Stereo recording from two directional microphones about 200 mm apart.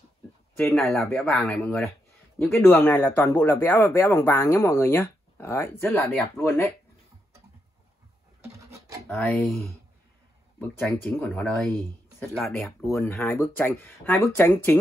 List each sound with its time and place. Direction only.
0.7 s speech: centre (ahead or behind)
8.5 s a sound: 15° right (ahead or behind)
9.1 s speech: 5° left (ahead or behind)